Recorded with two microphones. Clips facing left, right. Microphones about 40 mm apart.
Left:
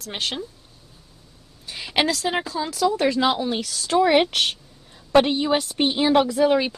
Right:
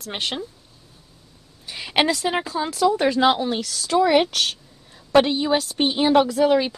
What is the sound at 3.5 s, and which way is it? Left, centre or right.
Speech, centre.